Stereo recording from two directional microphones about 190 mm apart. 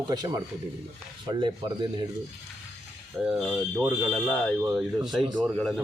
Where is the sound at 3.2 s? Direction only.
Centre (ahead or behind).